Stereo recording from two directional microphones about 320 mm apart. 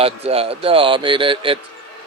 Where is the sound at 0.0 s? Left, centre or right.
Centre.